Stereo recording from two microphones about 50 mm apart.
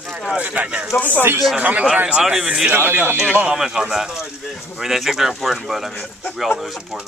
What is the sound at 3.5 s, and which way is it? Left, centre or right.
Speech, centre.